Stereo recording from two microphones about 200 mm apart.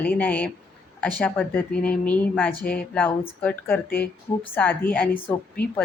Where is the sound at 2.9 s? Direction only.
5° left (ahead or behind).